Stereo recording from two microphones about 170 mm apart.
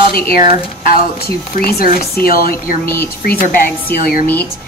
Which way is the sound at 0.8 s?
60° left (ahead or behind).